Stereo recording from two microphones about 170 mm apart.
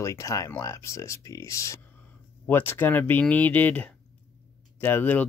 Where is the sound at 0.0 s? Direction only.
20° left (ahead or behind).